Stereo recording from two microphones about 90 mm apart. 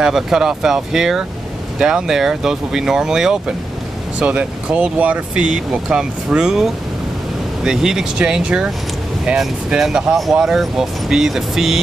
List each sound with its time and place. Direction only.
0.0 s speech: 5° right (ahead or behind)